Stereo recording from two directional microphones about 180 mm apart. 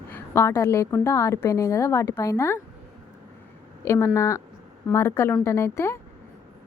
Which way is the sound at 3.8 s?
15° left (ahead or behind).